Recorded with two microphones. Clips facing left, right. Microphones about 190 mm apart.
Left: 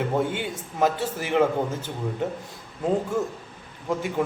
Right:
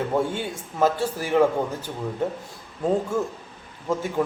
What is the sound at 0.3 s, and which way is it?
Speech, 15° left (ahead or behind).